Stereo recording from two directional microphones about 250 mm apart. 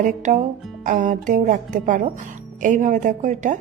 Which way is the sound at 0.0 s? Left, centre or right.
Right.